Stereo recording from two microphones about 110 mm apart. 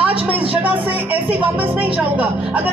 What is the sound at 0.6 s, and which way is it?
A woman's voice, 15° right (ahead or behind).